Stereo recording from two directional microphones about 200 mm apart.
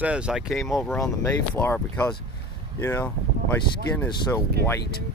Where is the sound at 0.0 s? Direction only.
5° right (ahead or behind).